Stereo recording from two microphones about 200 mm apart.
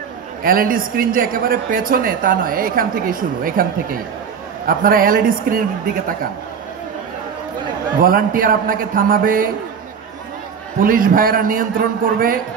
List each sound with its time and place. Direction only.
0.4 s a man's voice: 45° right (ahead or behind)
8.0 s a man's voice: 45° right (ahead or behind)
10.8 s a man's voice: 45° right (ahead or behind)